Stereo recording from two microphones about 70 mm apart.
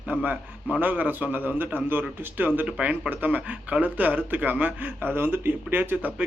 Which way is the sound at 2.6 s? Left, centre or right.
Centre.